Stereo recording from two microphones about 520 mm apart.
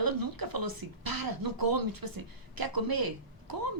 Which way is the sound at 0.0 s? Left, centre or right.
Right.